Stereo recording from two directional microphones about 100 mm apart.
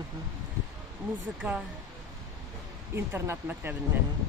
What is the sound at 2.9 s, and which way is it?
Speech, 25° right (ahead or behind).